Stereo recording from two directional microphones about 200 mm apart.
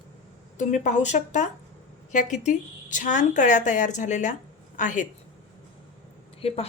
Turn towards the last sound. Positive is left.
turn(degrees=30)  # may be behind; listen again after turning